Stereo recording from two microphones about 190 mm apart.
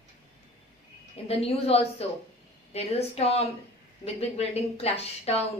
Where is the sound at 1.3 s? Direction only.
30° left (ahead or behind).